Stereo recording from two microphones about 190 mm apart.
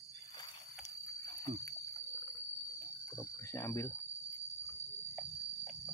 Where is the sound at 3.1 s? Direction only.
15° left (ahead or behind).